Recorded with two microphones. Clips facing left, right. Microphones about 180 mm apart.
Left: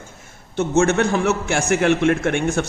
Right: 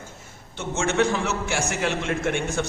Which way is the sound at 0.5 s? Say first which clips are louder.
Left 7 dB; 45° left (ahead or behind).